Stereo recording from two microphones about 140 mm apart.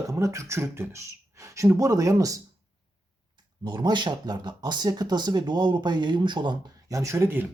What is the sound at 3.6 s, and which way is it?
Speech, 30° right (ahead or behind).